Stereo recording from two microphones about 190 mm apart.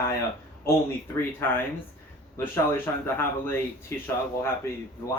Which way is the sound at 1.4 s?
10° left (ahead or behind).